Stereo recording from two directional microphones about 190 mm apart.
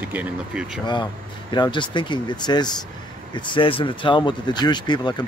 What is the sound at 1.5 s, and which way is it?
Speech, 25° left (ahead or behind).